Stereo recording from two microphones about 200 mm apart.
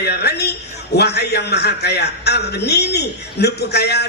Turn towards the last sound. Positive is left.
turn(degrees=55)  # may be behind; listen again after turning